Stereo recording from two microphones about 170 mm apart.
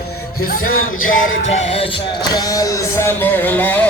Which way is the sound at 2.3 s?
20° left (ahead or behind).